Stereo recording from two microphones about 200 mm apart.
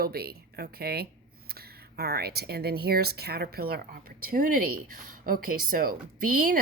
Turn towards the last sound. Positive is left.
turn(degrees=-45)  # may be behind; listen again after turning